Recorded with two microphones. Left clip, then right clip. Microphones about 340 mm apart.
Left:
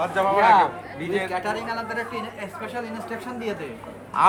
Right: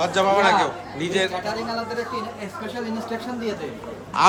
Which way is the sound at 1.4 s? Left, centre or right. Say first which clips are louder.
Right 1 dB; left.